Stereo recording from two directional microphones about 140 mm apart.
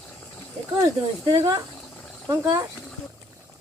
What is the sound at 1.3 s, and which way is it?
Speech, 25° right (ahead or behind).